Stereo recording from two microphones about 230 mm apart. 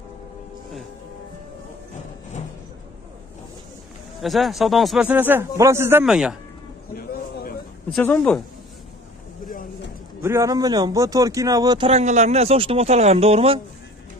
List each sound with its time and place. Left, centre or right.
4.2 s a man's voice: centre
7.0 s a sound: left
7.9 s a man's voice: centre
9.5 s a sound: left
10.2 s speech: centre
11.9 s speech: right